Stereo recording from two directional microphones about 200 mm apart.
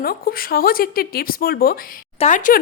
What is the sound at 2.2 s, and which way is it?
Speech, 40° left (ahead or behind).